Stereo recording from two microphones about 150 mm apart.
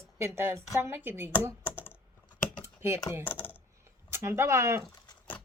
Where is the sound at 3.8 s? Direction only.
15° right (ahead or behind).